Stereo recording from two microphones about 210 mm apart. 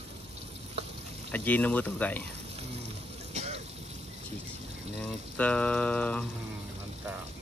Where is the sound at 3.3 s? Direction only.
30° right (ahead or behind).